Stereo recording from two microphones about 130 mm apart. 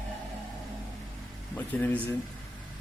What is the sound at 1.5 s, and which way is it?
Speech, 15° left (ahead or behind).